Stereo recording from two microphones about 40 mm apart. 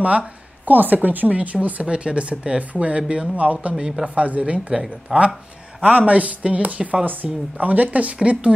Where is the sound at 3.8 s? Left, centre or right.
Centre.